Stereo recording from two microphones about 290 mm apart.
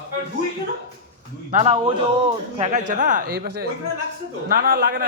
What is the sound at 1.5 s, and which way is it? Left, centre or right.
A man's voice, right.